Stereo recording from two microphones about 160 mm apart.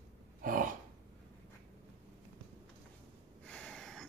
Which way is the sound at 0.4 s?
60° right (ahead or behind).